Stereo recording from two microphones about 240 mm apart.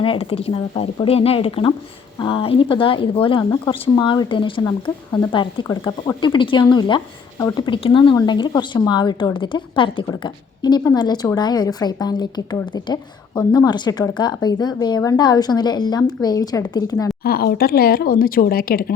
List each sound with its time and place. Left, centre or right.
0.0 s a woman's voice: left
17.2 s speech: left